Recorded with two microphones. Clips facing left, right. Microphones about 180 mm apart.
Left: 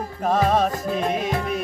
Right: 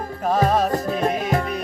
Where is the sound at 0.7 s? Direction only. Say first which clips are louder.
Right 3 dB; 45° right (ahead or behind).